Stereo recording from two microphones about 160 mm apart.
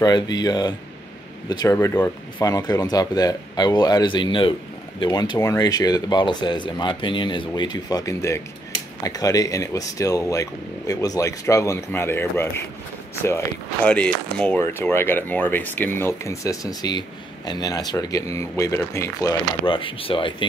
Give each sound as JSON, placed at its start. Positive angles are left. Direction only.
{"t": 0.0, "sound": "speech", "side_deg": 25}
{"t": 19.6, "sound": "speech", "side_deg": 35}